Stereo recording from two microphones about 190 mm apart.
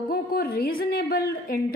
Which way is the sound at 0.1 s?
50° left (ahead or behind).